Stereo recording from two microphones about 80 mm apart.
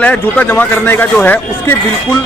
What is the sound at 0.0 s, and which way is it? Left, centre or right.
Speech, centre.